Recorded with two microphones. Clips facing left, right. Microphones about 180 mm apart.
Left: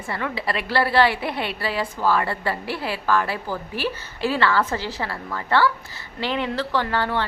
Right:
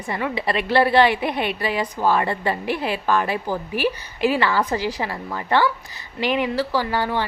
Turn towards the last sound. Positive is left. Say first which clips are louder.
# right 1 dB
turn(degrees=-10)  # may be behind; listen again after turning